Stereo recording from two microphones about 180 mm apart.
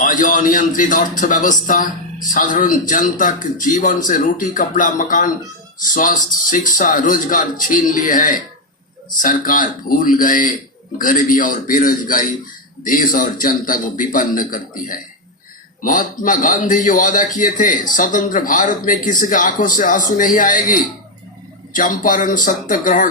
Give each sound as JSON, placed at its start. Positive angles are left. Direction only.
{"t": 0.0, "sound": "a man's voice", "side_deg": 50}